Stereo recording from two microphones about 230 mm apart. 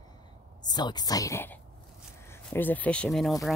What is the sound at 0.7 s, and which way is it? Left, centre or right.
Speech, centre.